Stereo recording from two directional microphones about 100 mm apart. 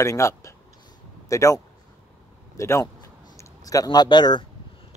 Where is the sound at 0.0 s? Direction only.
30° left (ahead or behind).